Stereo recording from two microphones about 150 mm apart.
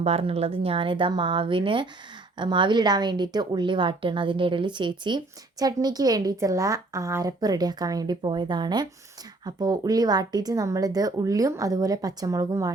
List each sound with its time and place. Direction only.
0.0 s a woman's voice: 40° right (ahead or behind); by 12.7 s 25° right (ahead or behind)